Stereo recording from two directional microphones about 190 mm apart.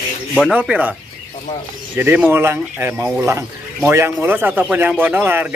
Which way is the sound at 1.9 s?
10° right (ahead or behind).